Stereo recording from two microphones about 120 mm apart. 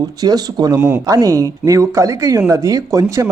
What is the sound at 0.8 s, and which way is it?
Speech, 20° right (ahead or behind).